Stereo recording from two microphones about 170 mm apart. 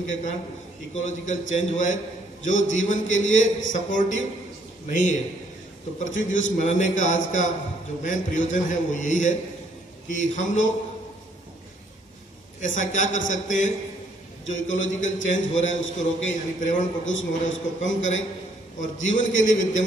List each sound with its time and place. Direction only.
0.1 s a man's voice: 45° left (ahead or behind)
12.5 s a man's voice: 45° left (ahead or behind)
17.0 s a man's voice: 90° left
18.8 s a man's voice: 45° left (ahead or behind)